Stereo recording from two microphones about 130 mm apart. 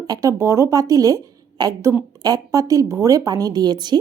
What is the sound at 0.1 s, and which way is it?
A woman's voice, 25° right (ahead or behind).